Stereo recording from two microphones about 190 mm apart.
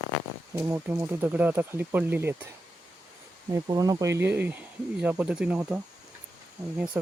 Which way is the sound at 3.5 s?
20° right (ahead or behind).